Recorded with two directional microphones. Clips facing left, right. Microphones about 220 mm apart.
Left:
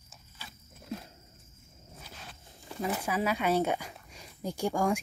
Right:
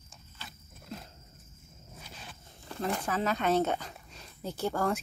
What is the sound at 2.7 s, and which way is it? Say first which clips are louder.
Dog: even; 10° left (ahead or behind).